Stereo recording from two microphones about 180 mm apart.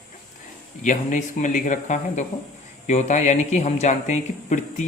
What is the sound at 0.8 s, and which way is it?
Speech, 45° left (ahead or behind).